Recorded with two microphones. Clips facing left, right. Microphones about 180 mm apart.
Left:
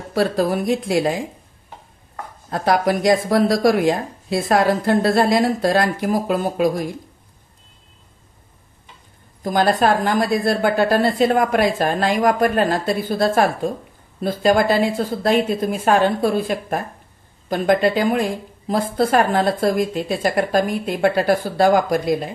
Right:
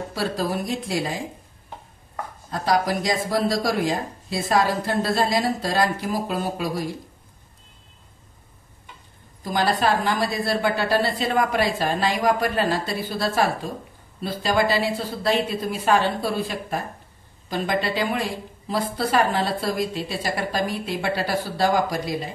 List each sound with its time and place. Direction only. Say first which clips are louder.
0.1 s speech: left 8 dB; 55° left (ahead or behind)
2.5 s speech: left 4 dB; 55° left (ahead or behind)
9.4 s a woman's voice: left 5 dB; 50° left (ahead or behind)